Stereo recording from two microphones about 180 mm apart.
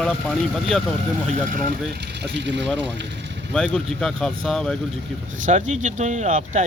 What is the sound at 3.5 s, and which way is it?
Speech, 5° left (ahead or behind).